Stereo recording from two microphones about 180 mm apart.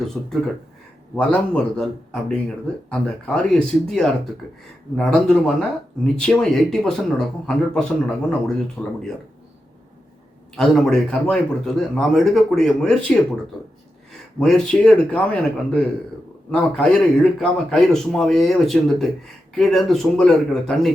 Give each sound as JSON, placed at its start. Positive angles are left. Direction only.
{"t": 0.0, "sound": "a man's voice", "side_deg": 5}
{"t": 8.8, "sound": "speech", "side_deg": 20}
{"t": 10.6, "sound": "a man's voice", "side_deg": 5}
{"t": 14.3, "sound": "a man's voice", "side_deg": 5}